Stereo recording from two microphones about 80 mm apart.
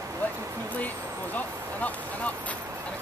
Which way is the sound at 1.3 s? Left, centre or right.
Centre.